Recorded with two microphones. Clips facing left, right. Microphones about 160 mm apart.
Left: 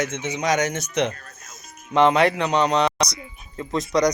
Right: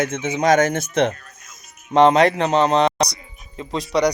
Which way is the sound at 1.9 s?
40° right (ahead or behind).